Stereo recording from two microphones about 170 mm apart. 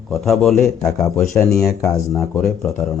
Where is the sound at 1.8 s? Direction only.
15° left (ahead or behind).